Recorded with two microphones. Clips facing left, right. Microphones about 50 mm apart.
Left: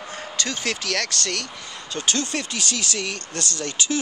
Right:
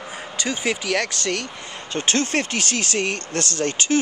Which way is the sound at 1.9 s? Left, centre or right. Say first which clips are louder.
Right 4 dB; right.